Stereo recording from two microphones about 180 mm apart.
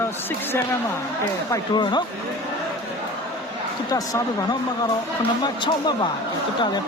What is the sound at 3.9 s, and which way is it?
Speech, 20° left (ahead or behind).